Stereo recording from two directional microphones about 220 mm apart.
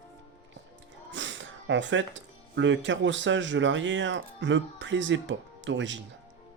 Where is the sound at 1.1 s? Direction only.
55° right (ahead or behind).